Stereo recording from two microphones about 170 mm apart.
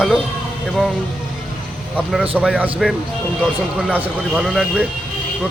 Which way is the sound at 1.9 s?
5° right (ahead or behind).